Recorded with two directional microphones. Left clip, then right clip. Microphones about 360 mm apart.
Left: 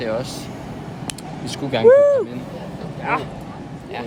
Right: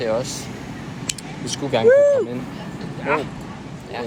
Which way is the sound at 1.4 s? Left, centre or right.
Centre.